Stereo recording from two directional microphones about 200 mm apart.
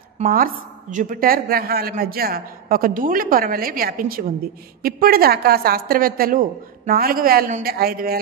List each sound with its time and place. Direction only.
0.2 s a woman's voice: 45° right (ahead or behind)